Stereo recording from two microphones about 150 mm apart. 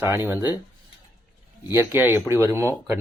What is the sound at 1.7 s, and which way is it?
Speech, 15° right (ahead or behind).